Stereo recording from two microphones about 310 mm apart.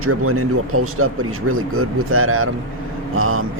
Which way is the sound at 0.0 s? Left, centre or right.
Right.